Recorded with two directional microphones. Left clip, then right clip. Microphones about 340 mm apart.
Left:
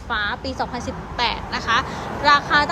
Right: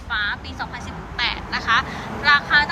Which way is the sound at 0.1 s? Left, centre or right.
Centre.